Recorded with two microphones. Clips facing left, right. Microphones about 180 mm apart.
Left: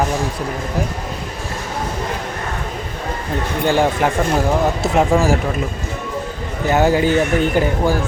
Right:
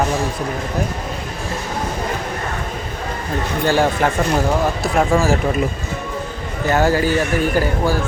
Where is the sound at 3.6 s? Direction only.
15° left (ahead or behind).